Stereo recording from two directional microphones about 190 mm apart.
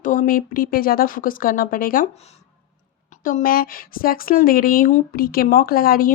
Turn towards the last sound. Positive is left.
turn(degrees=50)  # may be behind; listen again after turning